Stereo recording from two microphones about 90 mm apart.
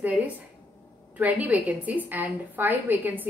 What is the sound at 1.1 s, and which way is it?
A woman's voice, 20° right (ahead or behind).